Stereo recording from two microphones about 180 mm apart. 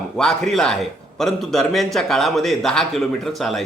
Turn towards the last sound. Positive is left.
turn(degrees=0)  # may be behind; listen again after turning